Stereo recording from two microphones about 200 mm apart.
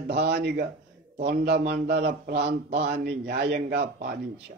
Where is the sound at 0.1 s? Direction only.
55° right (ahead or behind).